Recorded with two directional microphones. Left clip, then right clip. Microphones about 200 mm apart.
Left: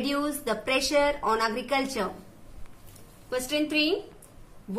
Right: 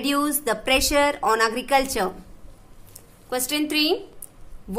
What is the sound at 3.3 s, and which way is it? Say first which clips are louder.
Speech: right 3 dB; 55° right (ahead or behind).